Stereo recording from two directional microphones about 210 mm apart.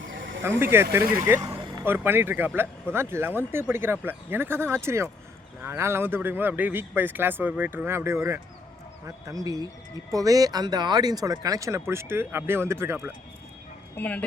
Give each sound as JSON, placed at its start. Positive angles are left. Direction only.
{"t": 0.1, "sound": "a sound", "side_deg": -65}
{"t": 0.4, "sound": "speech", "side_deg": -10}
{"t": 1.4, "sound": "vehicle", "side_deg": -25}
{"t": 1.8, "sound": "speech", "side_deg": -10}
{"t": 13.9, "sound": "speech", "side_deg": 5}